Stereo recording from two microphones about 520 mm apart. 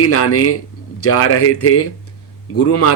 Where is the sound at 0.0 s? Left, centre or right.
Left.